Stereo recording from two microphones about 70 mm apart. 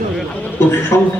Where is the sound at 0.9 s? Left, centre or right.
Left.